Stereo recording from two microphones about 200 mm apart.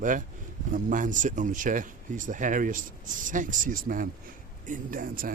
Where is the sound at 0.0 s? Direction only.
40° right (ahead or behind).